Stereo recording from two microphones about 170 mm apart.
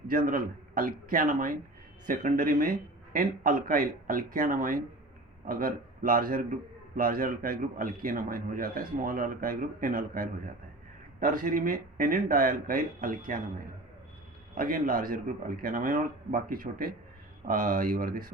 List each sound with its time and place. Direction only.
0.1 s a man's voice: 55° right (ahead or behind)
14.5 s a man's voice: 55° right (ahead or behind)